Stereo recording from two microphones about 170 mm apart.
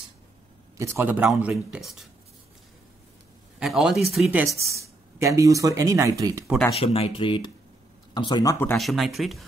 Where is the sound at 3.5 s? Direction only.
5° right (ahead or behind); by 6.4 s 20° right (ahead or behind).